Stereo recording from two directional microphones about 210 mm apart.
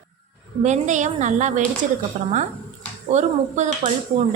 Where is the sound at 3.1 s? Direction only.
35° right (ahead or behind).